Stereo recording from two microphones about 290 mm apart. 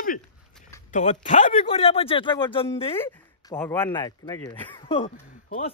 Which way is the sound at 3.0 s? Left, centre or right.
Centre.